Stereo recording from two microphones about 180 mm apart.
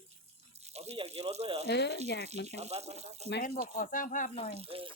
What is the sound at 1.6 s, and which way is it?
Speech, 70° left (ahead or behind).